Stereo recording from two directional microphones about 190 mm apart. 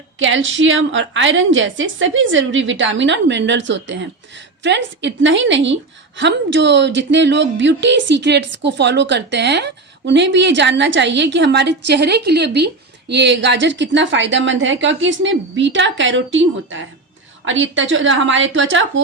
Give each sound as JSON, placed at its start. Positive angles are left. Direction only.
{"t": 0.2, "sound": "a woman's voice", "side_deg": -85}